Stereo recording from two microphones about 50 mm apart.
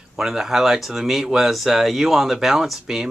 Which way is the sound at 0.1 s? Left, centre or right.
Centre.